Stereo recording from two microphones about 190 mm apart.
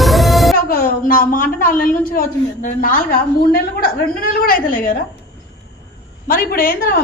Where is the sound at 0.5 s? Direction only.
50° left (ahead or behind).